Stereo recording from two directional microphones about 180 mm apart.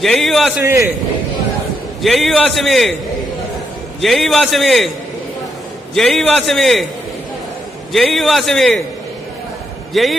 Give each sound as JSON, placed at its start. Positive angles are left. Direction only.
{"t": 0.0, "sound": "a man's voice", "side_deg": 0}
{"t": 0.6, "sound": "a man's voice", "side_deg": -15}
{"t": 2.0, "sound": "a man's voice", "side_deg": 0}
{"t": 4.0, "sound": "a man's voice", "side_deg": 0}
{"t": 5.9, "sound": "a man's voice", "side_deg": 0}
{"t": 7.9, "sound": "a man's voice", "side_deg": 0}
{"t": 9.9, "sound": "a man's voice", "side_deg": 0}